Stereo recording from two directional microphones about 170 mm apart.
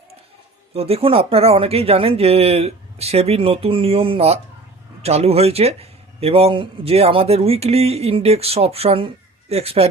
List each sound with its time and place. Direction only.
0.7 s a man's voice: 35° right (ahead or behind)